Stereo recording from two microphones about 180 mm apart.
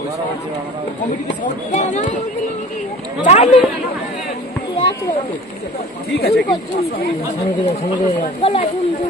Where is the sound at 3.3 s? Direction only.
35° left (ahead or behind).